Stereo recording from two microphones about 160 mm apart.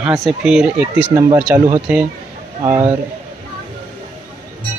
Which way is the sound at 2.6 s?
20° right (ahead or behind).